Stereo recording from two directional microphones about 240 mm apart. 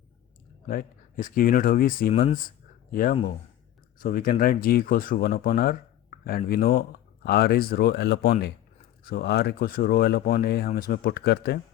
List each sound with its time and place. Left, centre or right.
0.7 s speech: left
2.1 s speech: left